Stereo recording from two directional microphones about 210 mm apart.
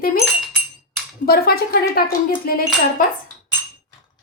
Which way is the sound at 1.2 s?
45° left (ahead or behind).